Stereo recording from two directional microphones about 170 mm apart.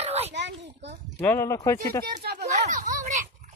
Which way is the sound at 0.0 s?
40° right (ahead or behind).